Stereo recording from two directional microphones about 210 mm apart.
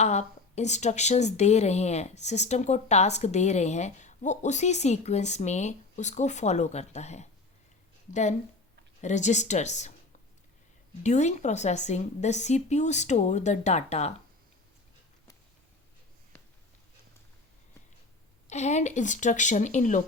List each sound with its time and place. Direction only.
0.0 s a woman's voice: 35° left (ahead or behind)
11.0 s a woman's voice: 35° left (ahead or behind)
18.4 s a woman's voice: 35° left (ahead or behind)